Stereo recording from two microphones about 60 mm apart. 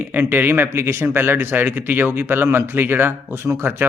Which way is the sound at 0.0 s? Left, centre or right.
Right.